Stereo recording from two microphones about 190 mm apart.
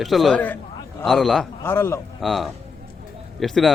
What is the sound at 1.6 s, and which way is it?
Speech, 10° left (ahead or behind).